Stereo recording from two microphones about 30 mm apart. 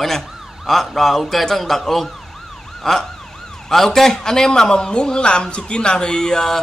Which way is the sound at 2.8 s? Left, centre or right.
Centre.